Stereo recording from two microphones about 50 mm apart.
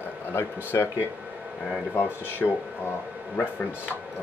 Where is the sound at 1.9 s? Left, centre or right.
Left.